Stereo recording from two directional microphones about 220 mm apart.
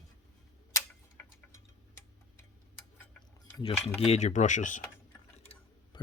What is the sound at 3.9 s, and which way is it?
Speech, 30° left (ahead or behind).